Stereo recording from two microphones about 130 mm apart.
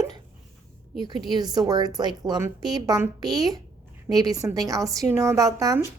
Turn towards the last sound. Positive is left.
turn(degrees=-25)  # may be behind; listen again after turning